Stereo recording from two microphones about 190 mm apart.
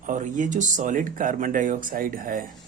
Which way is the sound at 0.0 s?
40° right (ahead or behind).